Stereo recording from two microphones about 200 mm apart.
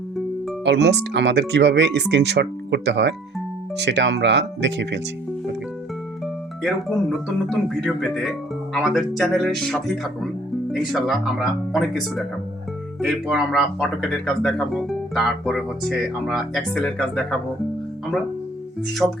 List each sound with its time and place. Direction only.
0.6 s speech: 60° right (ahead or behind)
7.1 s speech: centre (ahead or behind)
19.0 s speech: 5° left (ahead or behind)